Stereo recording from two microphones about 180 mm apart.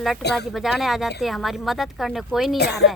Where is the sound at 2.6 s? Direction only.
65° left (ahead or behind).